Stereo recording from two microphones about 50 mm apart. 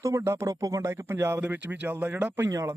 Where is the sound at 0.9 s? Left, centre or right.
Right.